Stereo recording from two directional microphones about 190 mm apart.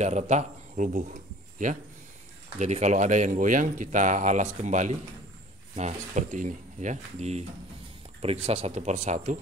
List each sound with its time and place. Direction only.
0.0 s speech: 35° right (ahead or behind)